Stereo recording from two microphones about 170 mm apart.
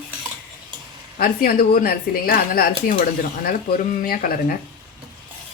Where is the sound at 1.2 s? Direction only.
60° left (ahead or behind).